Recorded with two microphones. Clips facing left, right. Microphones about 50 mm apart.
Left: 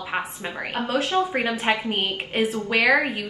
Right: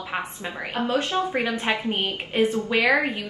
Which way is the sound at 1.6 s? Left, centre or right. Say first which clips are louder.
Left 1 dB; left.